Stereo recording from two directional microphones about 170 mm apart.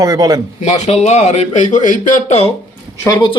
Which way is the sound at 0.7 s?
40° left (ahead or behind).